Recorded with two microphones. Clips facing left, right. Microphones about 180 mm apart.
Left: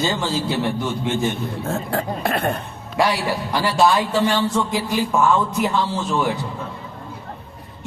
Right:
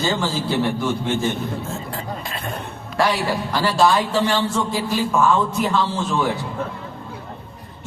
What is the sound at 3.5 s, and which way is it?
A man's voice, 15° left (ahead or behind).